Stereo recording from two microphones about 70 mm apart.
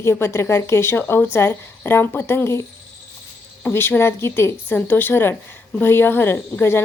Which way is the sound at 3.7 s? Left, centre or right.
Left.